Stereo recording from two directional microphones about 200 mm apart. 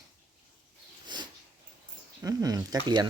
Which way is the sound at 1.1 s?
20° right (ahead or behind).